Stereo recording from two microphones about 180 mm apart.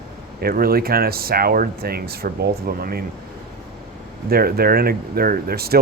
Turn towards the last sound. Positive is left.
turn(degrees=-60)  # may be behind; listen again after turning